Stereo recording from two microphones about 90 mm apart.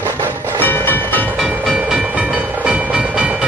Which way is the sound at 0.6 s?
20° left (ahead or behind).